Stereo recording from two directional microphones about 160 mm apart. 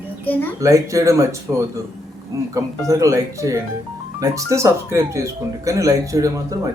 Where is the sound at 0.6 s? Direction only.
20° right (ahead or behind).